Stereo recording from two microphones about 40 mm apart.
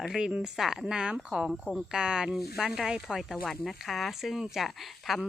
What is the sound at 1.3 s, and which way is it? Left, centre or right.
Speech, centre.